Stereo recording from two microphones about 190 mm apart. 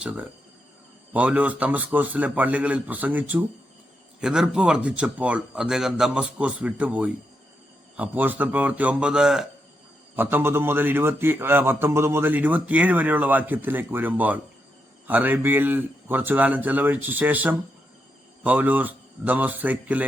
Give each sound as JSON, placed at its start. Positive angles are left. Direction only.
{"t": 0.0, "sound": "a man's voice", "side_deg": -5}